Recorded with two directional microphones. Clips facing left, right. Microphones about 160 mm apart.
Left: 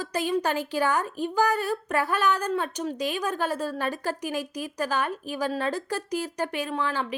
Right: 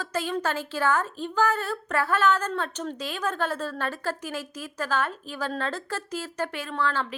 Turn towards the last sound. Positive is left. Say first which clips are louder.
# even
turn(degrees=15)  # may be behind; listen again after turning